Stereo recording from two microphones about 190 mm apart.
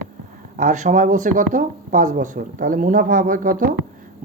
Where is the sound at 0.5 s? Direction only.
45° right (ahead or behind).